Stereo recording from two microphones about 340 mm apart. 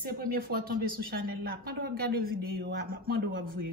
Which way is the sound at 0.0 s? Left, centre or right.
Right.